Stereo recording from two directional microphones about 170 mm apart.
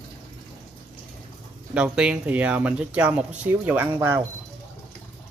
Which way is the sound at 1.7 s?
5° right (ahead or behind).